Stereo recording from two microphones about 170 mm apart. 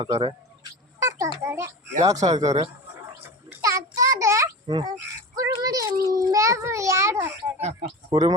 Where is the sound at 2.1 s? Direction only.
40° right (ahead or behind).